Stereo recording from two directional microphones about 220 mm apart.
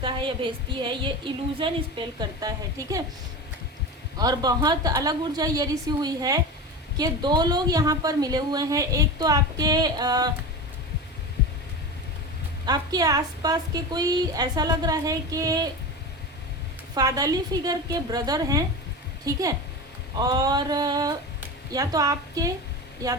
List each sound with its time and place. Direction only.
0.0 s a woman's voice: 20° right (ahead or behind)
4.2 s a woman's voice: 15° right (ahead or behind)
12.6 s a woman's voice: 20° right (ahead or behind)
16.9 s a woman's voice: 15° right (ahead or behind)